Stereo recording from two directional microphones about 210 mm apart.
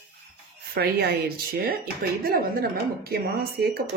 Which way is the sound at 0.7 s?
50° right (ahead or behind).